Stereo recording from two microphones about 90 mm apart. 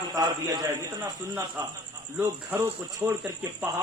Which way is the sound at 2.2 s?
20° right (ahead or behind).